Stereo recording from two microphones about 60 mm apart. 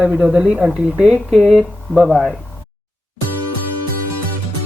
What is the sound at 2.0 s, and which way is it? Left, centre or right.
Speech, centre.